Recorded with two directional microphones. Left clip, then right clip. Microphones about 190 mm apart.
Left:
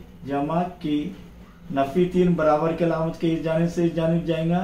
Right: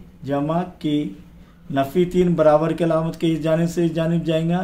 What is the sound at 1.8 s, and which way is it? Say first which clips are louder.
Speech: right 2 dB; 45° right (ahead or behind).